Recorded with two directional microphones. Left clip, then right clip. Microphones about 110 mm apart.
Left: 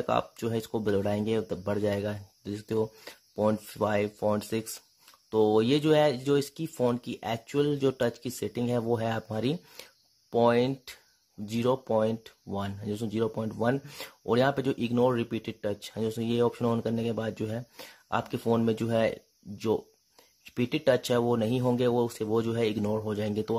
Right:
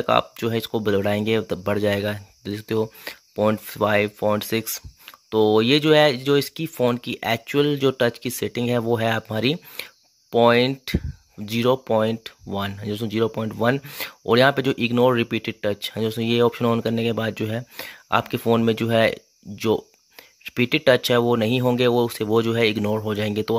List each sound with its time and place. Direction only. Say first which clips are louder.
0.0 s speech: right 8 dB; 15° right (ahead or behind)
20.4 s speech: right 8 dB; 15° right (ahead or behind)